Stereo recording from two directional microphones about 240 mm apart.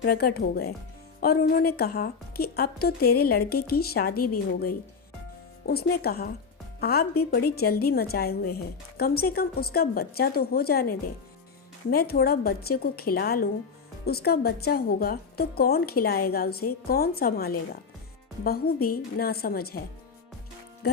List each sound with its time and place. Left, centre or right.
0.0 s a woman's voice: left
5.6 s a woman's voice: left